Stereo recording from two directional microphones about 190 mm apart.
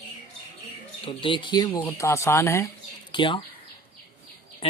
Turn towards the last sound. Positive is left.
turn(degrees=25)  # may be behind; listen again after turning